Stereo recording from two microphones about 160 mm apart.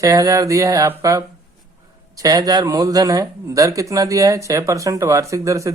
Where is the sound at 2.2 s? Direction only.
25° right (ahead or behind).